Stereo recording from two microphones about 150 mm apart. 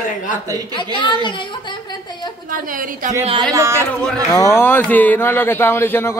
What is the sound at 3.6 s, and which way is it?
Speech, 20° right (ahead or behind).